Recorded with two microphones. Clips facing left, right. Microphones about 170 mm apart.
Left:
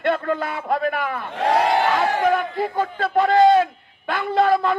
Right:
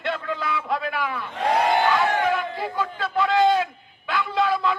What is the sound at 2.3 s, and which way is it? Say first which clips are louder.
Speech: left 4 dB; 50° left (ahead or behind).